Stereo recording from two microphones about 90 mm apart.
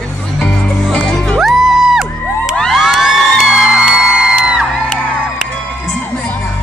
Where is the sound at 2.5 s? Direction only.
5° left (ahead or behind).